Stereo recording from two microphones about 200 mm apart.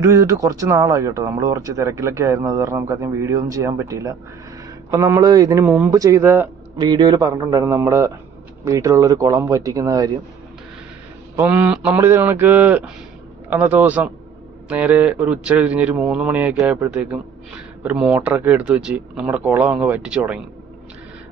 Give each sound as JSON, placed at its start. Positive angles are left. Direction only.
{"t": 0.0, "sound": "speech", "side_deg": -15}
{"t": 6.8, "sound": "speech", "side_deg": -20}
{"t": 11.3, "sound": "speech", "side_deg": -10}